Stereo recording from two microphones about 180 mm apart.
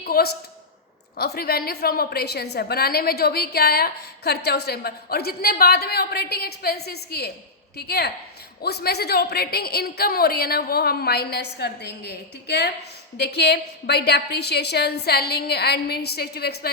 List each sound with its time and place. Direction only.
0.0 s a woman's voice: 60° left (ahead or behind)